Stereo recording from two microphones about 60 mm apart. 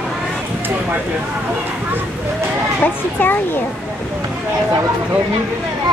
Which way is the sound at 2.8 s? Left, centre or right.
Left.